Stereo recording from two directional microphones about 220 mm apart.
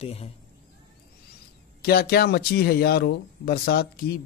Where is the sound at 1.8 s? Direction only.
45° left (ahead or behind).